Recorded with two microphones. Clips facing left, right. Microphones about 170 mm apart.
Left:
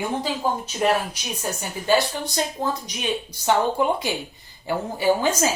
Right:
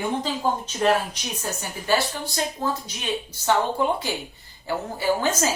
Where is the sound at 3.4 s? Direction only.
15° left (ahead or behind).